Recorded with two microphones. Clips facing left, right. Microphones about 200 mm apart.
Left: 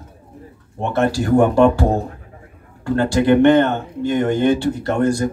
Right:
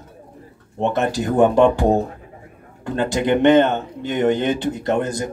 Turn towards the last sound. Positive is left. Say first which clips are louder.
# left 3 dB
turn(degrees=-20)  # may be behind; listen again after turning